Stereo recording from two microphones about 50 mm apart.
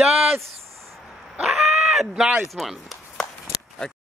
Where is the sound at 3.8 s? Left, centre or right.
Left.